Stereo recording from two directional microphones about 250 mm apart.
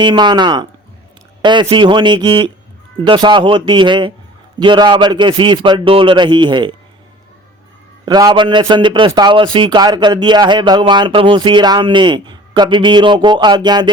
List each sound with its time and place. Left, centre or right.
0.0 s a man's voice: centre
8.0 s a man's voice: centre